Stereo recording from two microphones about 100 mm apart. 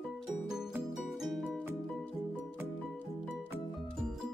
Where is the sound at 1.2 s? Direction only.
5° right (ahead or behind).